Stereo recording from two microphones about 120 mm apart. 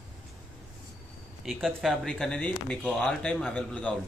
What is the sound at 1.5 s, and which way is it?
Speech, centre (ahead or behind).